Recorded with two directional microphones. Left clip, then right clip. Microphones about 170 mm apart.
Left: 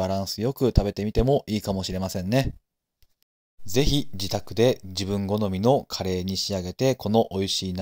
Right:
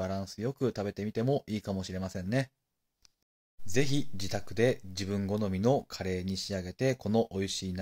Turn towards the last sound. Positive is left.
turn(degrees=35)  # may be behind; listen again after turning